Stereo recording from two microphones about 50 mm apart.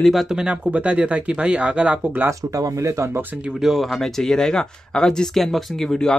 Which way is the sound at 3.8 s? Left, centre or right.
Centre.